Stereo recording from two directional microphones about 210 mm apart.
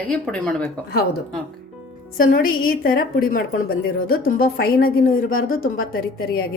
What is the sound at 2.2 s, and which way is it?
A woman's voice, 40° left (ahead or behind).